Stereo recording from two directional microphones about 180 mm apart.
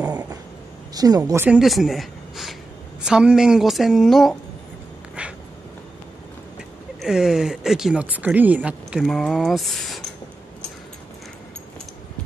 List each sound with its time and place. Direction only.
0.9 s a woman's voice: 20° right (ahead or behind)
1.6 s speech: centre (ahead or behind)
7.0 s speech: centre (ahead or behind)